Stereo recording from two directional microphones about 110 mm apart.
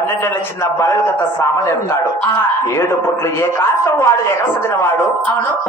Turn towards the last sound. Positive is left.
turn(degrees=20)  # may be behind; listen again after turning